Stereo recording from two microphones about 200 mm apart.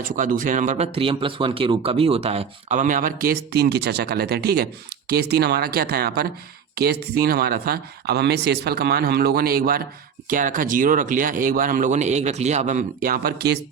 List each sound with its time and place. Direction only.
0.0 s speech: 40° right (ahead or behind)
0.9 s speech: 25° right (ahead or behind); by 13.6 s 50° right (ahead or behind)